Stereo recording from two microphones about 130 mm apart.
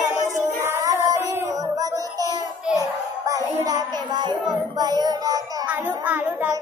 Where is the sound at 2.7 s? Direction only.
25° right (ahead or behind).